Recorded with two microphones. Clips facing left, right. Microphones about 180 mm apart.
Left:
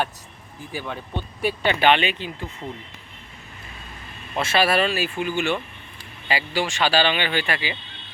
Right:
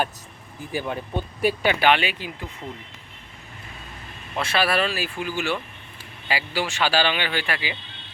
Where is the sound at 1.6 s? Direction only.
10° right (ahead or behind).